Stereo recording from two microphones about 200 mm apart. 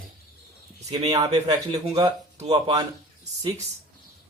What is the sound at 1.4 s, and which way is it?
Speech, 20° right (ahead or behind).